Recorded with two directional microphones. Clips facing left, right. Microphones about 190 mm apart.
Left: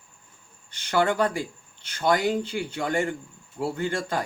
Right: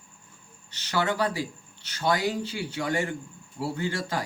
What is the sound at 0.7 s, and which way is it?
Speech, 50° left (ahead or behind).